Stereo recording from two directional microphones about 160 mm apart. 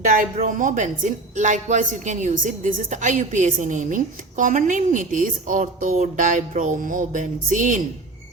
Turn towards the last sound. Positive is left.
turn(degrees=-50)  # may be behind; listen again after turning